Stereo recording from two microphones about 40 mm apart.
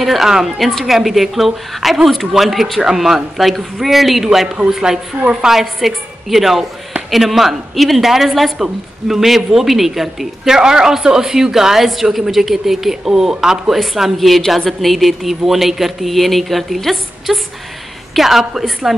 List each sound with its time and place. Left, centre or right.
0.0 s a woman's voice: centre
5.2 s a woman's voice: right
5.5 s a woman's voice: centre